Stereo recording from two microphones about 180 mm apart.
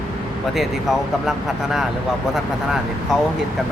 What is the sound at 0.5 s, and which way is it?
Speech, centre (ahead or behind).